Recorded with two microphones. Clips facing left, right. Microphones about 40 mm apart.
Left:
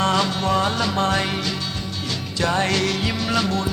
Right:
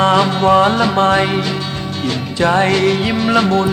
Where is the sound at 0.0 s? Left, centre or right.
Right.